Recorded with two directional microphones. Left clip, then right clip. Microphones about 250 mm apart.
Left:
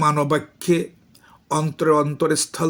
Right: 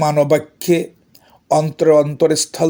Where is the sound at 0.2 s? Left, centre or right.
Centre.